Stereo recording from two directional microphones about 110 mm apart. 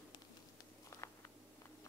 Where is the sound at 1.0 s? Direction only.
25° left (ahead or behind).